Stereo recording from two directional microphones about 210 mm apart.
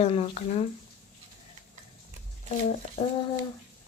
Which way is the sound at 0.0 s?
30° left (ahead or behind).